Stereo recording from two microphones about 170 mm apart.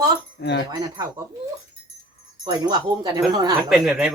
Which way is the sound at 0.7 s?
20° right (ahead or behind).